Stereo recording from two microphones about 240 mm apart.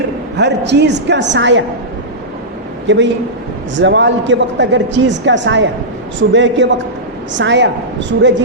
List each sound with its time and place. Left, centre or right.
0.3 s speech: right
2.8 s a man's voice: right